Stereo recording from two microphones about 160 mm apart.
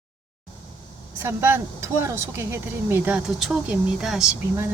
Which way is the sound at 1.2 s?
15° right (ahead or behind).